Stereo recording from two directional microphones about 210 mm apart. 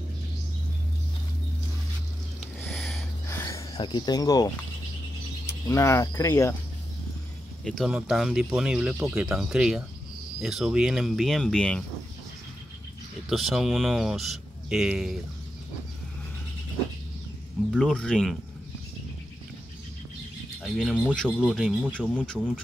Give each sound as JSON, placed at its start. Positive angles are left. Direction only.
{"t": 2.6, "sound": "a sound", "side_deg": 5}
{"t": 3.3, "sound": "a sound", "side_deg": 15}
{"t": 5.5, "sound": "cricket", "side_deg": 15}
{"t": 7.6, "sound": "speech", "side_deg": 0}
{"t": 13.3, "sound": "speech", "side_deg": 0}
{"t": 17.7, "sound": "speech", "side_deg": 0}
{"t": 20.6, "sound": "speech", "side_deg": 0}